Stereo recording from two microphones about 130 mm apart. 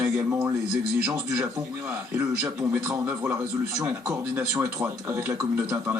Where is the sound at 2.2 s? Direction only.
5° right (ahead or behind).